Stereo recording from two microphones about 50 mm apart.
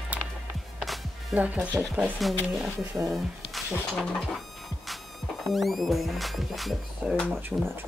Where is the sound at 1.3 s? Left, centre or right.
Right.